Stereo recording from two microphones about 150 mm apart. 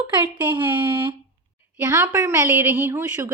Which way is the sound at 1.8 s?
15° right (ahead or behind).